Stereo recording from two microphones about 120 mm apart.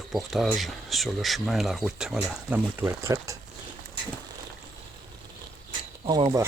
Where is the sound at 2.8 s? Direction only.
25° right (ahead or behind).